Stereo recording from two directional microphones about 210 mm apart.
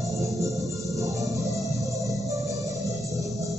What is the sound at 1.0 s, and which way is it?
Music, 15° right (ahead or behind).